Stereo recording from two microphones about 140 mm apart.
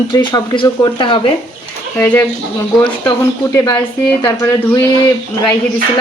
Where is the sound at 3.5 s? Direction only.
30° left (ahead or behind).